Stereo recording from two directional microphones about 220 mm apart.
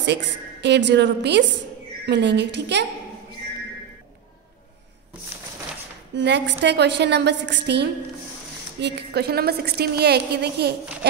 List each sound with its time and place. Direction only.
0.0 s a woman's voice: 50° right (ahead or behind)
6.1 s a woman's voice: 55° right (ahead or behind)